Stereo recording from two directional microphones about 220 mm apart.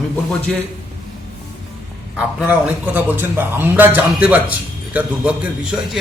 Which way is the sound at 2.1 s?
5° right (ahead or behind).